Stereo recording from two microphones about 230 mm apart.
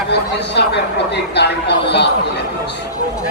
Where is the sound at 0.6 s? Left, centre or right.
Left.